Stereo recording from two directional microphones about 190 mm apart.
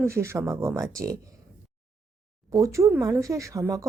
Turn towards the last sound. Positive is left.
turn(degrees=-15)  # may be behind; listen again after turning